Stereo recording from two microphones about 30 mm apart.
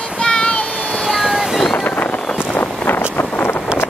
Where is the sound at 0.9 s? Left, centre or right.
Centre.